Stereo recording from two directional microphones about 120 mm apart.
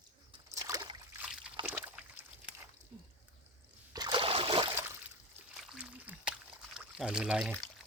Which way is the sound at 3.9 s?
35° right (ahead or behind).